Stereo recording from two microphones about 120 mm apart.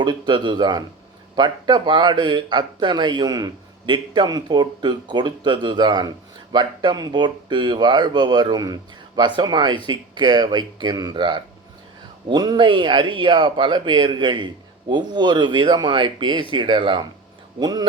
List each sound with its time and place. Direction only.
0.0 s speech: 40° right (ahead or behind)